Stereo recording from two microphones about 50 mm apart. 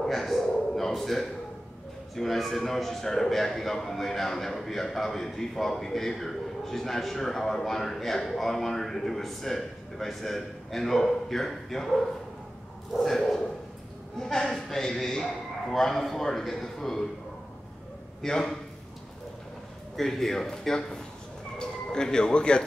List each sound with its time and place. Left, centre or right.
0.0 s a sound: centre
2.1 s a man's voice: centre
18.2 s a man's voice: centre
20.0 s a man's voice: centre